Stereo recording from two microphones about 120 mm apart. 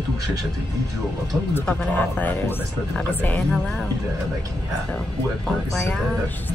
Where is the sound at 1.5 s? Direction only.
15° left (ahead or behind).